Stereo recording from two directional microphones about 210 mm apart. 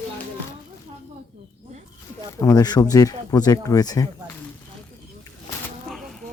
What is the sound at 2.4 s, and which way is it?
Speech, 20° left (ahead or behind).